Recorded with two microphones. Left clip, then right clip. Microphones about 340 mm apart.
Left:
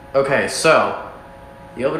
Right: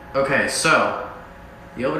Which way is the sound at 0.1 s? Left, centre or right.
Centre.